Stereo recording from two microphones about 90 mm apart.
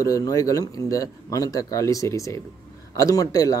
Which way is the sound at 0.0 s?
40° left (ahead or behind).